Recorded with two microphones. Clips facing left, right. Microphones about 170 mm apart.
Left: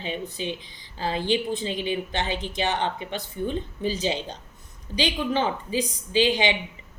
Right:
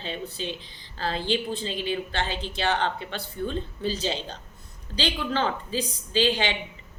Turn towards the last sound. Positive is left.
turn(degrees=15)  # may be behind; listen again after turning